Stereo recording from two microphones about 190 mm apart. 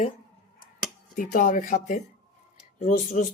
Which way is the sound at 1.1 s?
45° left (ahead or behind).